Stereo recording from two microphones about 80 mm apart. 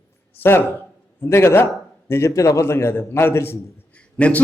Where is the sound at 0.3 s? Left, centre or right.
Left.